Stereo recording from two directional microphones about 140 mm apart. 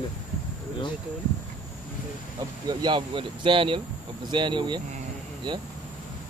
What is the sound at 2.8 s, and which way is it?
A man's voice, 35° right (ahead or behind).